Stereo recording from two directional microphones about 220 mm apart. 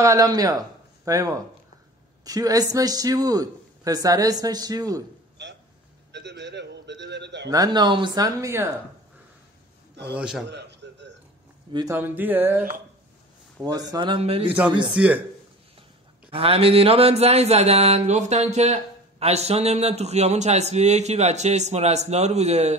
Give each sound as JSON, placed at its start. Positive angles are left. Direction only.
{"t": 0.0, "sound": "a man's voice", "side_deg": -15}
{"t": 6.1, "sound": "a man's voice", "side_deg": -50}
{"t": 7.4, "sound": "speech", "side_deg": -15}
{"t": 10.1, "sound": "speech", "side_deg": -5}
{"t": 10.5, "sound": "a sound", "side_deg": -50}
{"t": 11.7, "sound": "speech", "side_deg": -15}
{"t": 14.9, "sound": "speech", "side_deg": -5}
{"t": 16.3, "sound": "speech", "side_deg": -25}